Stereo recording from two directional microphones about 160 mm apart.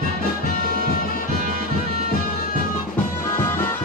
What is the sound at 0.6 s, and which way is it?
Music, 70° right (ahead or behind).